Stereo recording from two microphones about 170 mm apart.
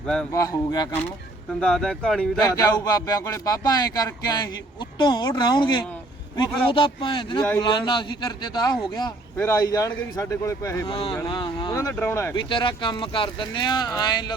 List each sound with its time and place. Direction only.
0.3 s speech: 20° left (ahead or behind)
1.6 s speech: 5° left (ahead or behind)
2.4 s speech: 20° left (ahead or behind)
10.9 s speech: 30° left (ahead or behind)
11.7 s speech: 15° left (ahead or behind)